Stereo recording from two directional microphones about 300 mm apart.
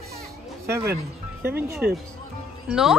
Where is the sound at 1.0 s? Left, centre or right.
Right.